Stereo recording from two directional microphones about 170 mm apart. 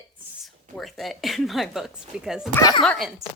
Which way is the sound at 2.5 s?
20° left (ahead or behind).